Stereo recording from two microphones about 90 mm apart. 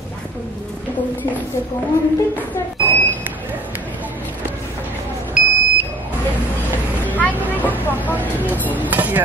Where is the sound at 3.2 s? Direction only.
20° right (ahead or behind).